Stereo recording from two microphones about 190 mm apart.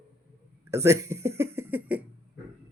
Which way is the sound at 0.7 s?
15° right (ahead or behind).